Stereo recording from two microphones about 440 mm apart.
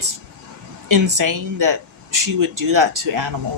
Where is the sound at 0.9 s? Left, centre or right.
Right.